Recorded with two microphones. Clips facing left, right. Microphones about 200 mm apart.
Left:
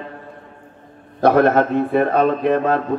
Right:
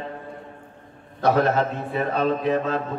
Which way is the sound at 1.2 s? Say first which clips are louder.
Left 6 dB; 55° left (ahead or behind).